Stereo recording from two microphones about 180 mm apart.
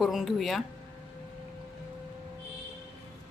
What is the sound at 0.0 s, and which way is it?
Speech, centre (ahead or behind).